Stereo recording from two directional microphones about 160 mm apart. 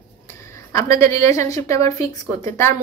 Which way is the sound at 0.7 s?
20° left (ahead or behind).